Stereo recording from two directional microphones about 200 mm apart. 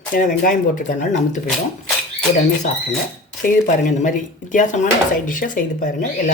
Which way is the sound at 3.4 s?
40° left (ahead or behind).